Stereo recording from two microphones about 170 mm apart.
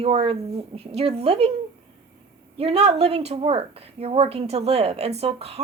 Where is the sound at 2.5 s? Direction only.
35° right (ahead or behind).